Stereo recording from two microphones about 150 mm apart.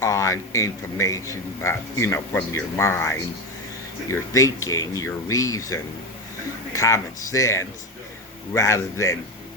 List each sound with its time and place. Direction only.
0.0 s speech: 20° left (ahead or behind)
4.1 s speech: 20° left (ahead or behind)